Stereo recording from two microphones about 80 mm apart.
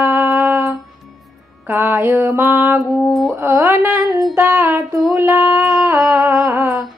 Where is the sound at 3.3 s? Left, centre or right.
Right.